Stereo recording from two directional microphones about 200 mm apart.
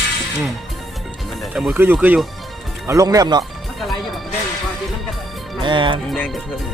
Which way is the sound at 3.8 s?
Centre (ahead or behind).